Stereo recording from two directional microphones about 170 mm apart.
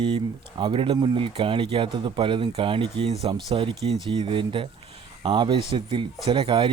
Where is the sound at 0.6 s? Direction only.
30° right (ahead or behind).